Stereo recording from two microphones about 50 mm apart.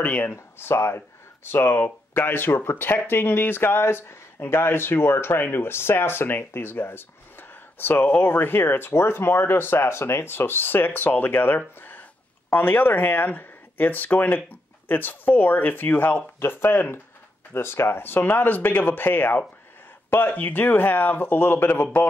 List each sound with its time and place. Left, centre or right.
0.6 s speech: left
1.8 s speech: left